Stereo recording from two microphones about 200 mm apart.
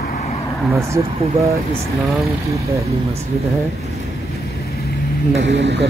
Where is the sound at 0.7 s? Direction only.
15° right (ahead or behind).